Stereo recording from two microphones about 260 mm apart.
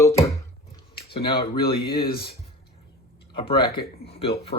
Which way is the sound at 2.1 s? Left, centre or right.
Left.